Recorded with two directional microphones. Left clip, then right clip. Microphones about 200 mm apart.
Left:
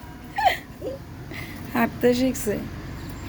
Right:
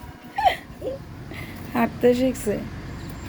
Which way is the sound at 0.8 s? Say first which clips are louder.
Right 2 dB; 5° right (ahead or behind).